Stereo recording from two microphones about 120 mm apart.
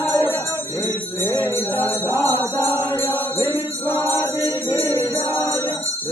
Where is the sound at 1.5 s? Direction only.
20° left (ahead or behind).